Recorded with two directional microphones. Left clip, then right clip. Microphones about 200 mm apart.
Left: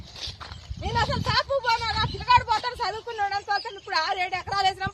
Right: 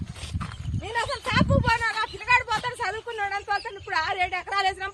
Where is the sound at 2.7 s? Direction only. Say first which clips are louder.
Even; 30° right (ahead or behind).